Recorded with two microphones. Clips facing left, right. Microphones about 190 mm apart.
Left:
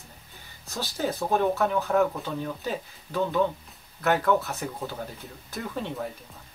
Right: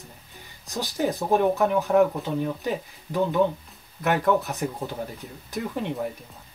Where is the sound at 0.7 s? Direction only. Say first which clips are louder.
Right 3 dB; 15° right (ahead or behind).